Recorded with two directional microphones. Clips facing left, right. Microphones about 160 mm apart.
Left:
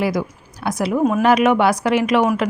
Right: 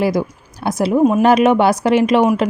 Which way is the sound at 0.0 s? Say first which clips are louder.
Right 3 dB; 30° right (ahead or behind).